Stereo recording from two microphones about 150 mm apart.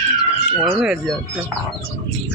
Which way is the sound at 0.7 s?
10° right (ahead or behind).